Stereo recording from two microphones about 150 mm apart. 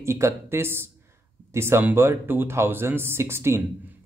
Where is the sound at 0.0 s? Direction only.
20° right (ahead or behind).